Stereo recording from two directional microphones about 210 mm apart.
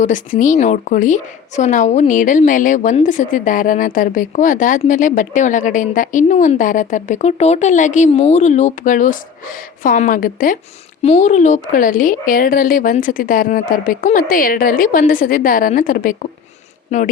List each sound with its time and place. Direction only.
0.0 s speech: 40° left (ahead or behind)